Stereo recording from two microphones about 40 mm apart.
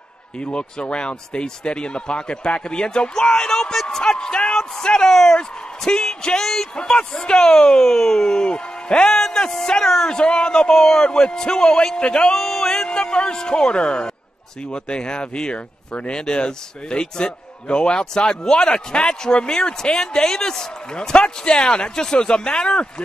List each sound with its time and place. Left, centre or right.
0.4 s speech: left; by 6.7 s centre
6.7 s speech: left
8.4 s speech: left
9.1 s speech: centre
10.0 s speech: left
10.7 s speech: centre
11.1 s speech: left
12.4 s a sound: centre
13.1 s speech: left